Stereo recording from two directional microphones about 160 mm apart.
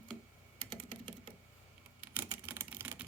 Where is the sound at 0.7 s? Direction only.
30° right (ahead or behind).